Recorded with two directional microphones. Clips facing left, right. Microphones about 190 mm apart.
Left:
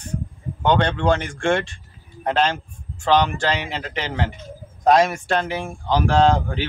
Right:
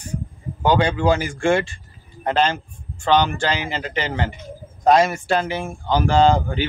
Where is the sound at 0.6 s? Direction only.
5° right (ahead or behind).